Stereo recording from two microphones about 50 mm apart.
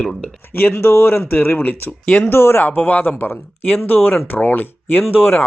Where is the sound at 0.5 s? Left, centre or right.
Left.